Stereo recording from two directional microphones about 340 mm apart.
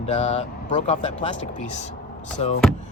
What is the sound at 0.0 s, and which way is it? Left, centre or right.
Speech, centre.